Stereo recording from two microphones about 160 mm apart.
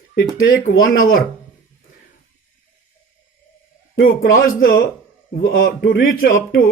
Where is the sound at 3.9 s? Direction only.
70° left (ahead or behind).